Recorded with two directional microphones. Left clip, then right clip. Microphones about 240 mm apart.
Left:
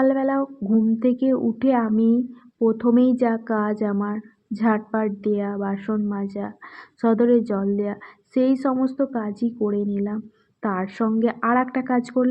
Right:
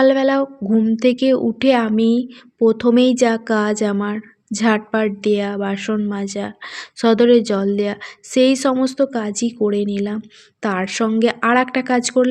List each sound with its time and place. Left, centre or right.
0.0 s speech: right